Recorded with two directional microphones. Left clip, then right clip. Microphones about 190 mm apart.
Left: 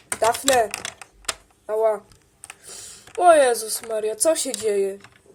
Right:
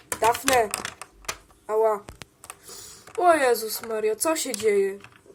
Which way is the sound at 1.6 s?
25° left (ahead or behind).